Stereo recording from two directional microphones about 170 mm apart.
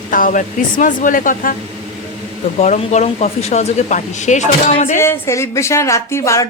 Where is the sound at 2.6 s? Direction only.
45° left (ahead or behind).